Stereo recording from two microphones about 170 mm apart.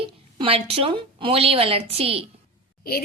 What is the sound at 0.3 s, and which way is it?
A woman's voice, 35° right (ahead or behind).